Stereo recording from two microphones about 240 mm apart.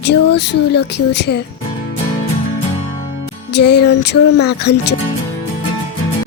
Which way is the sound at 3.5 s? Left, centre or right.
Left.